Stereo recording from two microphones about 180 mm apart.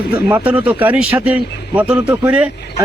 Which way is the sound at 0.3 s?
10° right (ahead or behind).